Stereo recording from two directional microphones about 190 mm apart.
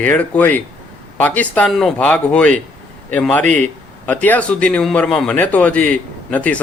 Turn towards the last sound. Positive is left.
turn(degrees=5)  # may be behind; listen again after turning